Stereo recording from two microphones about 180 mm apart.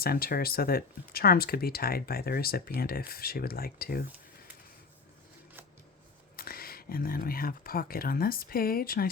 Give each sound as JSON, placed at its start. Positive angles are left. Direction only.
{"t": 0.0, "sound": "speech", "side_deg": 55}
{"t": 6.3, "sound": "speech", "side_deg": 55}